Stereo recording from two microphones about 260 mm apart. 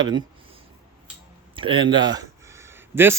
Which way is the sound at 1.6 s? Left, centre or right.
Centre.